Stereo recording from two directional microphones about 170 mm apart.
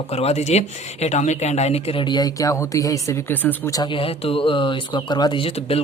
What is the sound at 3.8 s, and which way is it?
A woman's voice, 30° left (ahead or behind).